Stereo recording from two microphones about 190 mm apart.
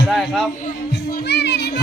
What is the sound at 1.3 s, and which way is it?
Children playing, 60° left (ahead or behind).